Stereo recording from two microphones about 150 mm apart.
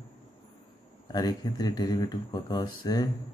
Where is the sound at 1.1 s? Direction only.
25° left (ahead or behind).